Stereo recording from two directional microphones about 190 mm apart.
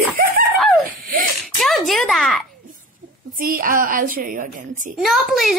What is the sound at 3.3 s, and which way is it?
A woman's voice, 45° right (ahead or behind).